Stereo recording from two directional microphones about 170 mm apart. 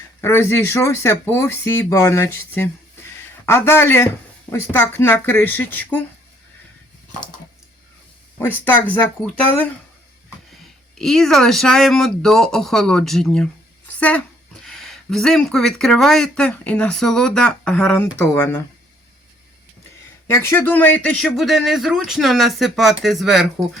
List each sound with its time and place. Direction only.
0.2 s speech: 15° left (ahead or behind)
2.6 s a sound: 15° left (ahead or behind)
4.5 s speech: 15° left (ahead or behind)
10.5 s speech: centre (ahead or behind)
20.2 s speech: 15° left (ahead or behind)